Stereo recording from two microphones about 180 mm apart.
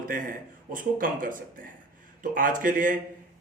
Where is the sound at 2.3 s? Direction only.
50° right (ahead or behind).